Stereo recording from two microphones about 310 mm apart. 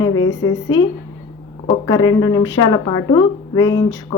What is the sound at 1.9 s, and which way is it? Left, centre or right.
A woman's voice, centre.